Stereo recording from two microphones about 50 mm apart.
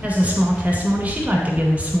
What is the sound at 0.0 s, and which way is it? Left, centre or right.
A woman's voice, right.